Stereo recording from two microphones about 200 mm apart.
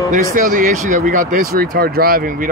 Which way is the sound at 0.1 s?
45° right (ahead or behind).